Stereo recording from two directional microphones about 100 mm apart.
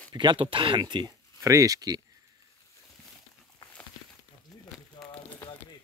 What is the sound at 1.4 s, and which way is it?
Speech, 35° right (ahead or behind).